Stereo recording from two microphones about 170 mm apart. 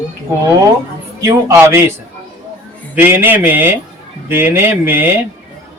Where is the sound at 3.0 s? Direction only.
10° right (ahead or behind).